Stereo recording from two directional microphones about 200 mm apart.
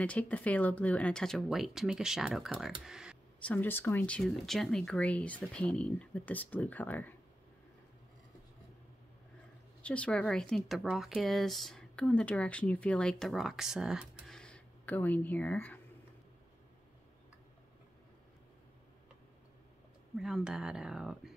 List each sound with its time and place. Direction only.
0.0 s speech: 5° left (ahead or behind)
2.8 s a sound: 5° right (ahead or behind)
3.4 s speech: 10° left (ahead or behind)
9.8 s speech: 5° left (ahead or behind)
20.2 s speech: centre (ahead or behind)